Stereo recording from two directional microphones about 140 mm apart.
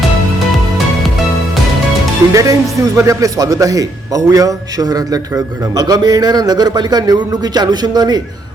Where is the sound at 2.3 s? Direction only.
25° right (ahead or behind).